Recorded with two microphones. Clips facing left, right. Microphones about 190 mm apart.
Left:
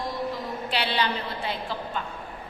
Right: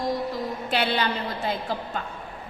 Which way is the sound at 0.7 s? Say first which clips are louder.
Right 2 dB; 50° right (ahead or behind).